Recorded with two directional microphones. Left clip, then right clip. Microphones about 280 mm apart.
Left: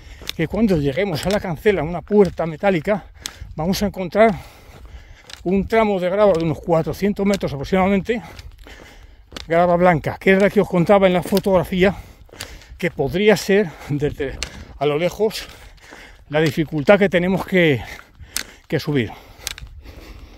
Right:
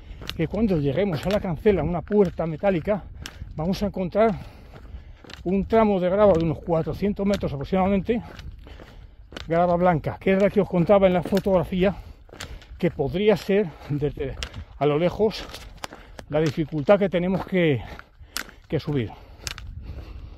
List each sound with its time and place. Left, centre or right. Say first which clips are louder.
0.4 s speech: left 5 dB; left
5.5 s speech: left 3 dB; left